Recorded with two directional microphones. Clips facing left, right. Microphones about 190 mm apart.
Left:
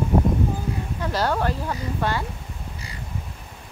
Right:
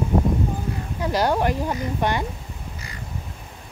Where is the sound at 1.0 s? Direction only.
15° right (ahead or behind).